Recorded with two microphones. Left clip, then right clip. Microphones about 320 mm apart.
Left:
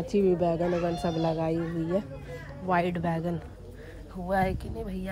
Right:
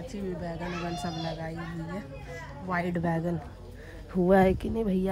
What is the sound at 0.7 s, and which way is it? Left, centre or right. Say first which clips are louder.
Speech: left 6 dB; centre.